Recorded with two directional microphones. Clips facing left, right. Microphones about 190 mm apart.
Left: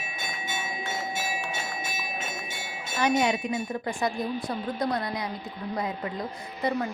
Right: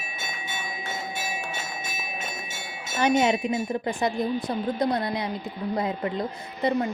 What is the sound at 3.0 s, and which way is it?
A woman's voice, 25° right (ahead or behind).